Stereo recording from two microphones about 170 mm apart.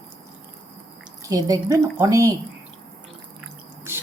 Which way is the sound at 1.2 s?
20° right (ahead or behind).